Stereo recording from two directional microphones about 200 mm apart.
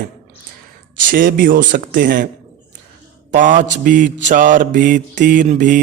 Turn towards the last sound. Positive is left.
turn(degrees=-40)  # may be behind; listen again after turning